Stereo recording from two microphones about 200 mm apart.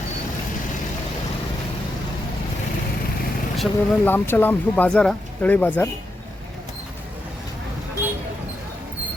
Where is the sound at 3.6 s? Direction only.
10° left (ahead or behind).